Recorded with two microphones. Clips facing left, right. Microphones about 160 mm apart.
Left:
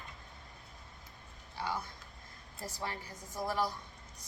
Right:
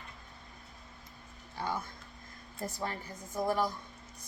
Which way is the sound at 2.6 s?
50° right (ahead or behind).